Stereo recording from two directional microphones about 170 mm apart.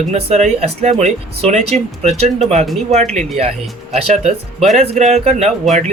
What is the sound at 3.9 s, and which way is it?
Speech, 40° right (ahead or behind).